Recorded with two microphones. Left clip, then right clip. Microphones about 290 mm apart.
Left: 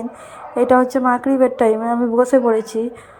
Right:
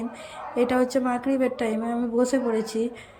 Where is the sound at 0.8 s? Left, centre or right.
Left.